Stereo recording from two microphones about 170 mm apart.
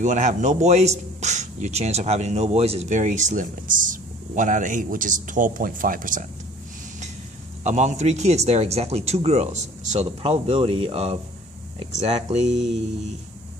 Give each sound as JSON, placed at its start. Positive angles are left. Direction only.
{"t": 0.0, "sound": "speech", "side_deg": -45}
{"t": 7.6, "sound": "speech", "side_deg": -45}